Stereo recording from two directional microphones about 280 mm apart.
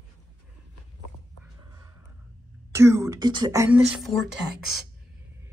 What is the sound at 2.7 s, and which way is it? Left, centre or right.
Speech, centre.